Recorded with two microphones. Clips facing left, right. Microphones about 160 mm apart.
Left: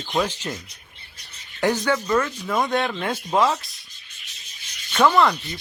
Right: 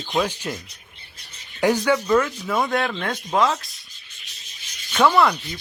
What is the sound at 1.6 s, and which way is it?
Speech, 10° right (ahead or behind).